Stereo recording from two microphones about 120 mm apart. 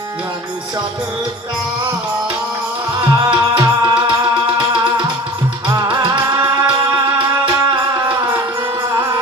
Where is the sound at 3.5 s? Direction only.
40° right (ahead or behind).